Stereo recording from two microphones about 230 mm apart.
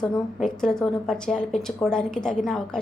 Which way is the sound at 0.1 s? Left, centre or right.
Centre.